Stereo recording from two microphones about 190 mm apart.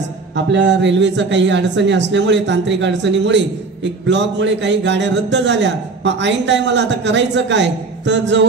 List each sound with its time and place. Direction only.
0.5 s speech: 70° right (ahead or behind)